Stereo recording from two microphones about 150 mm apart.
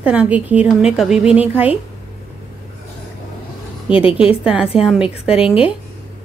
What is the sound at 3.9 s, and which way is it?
Speech, 35° left (ahead or behind).